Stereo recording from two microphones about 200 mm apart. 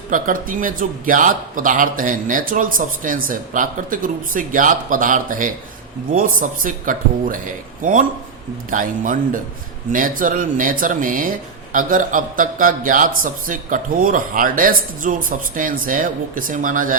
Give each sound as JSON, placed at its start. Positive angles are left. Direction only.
{"t": 0.1, "sound": "speech", "side_deg": -40}